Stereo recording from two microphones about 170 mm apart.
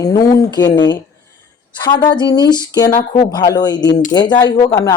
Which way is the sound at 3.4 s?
25° left (ahead or behind).